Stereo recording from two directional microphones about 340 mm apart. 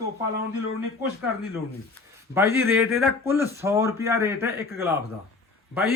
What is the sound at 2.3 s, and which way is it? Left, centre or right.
Speech, centre.